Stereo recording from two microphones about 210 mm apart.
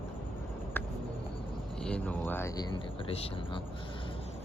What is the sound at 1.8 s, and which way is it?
Speech, 5° left (ahead or behind).